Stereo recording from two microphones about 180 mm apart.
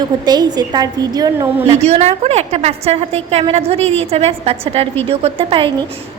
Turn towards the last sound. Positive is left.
turn(degrees=-30)  # may be behind; listen again after turning